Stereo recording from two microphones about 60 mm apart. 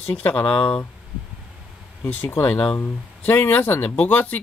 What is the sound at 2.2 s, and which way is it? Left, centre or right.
Speech, left.